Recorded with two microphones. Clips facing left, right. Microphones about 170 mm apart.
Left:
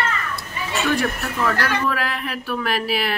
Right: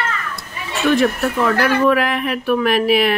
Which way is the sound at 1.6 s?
20° right (ahead or behind).